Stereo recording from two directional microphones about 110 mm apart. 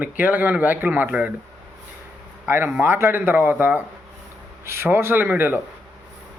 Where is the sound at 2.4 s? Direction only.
20° right (ahead or behind).